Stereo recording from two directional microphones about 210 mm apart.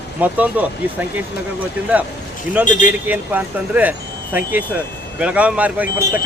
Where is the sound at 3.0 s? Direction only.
10° right (ahead or behind).